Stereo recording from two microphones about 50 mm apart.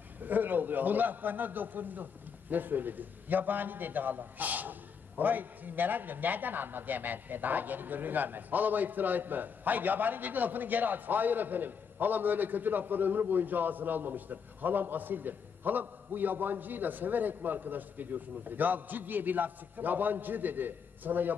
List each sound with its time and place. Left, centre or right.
0.2 s a man's voice: right